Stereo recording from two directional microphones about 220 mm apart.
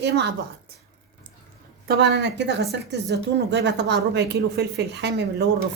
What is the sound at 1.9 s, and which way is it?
A woman's voice, 50° right (ahead or behind).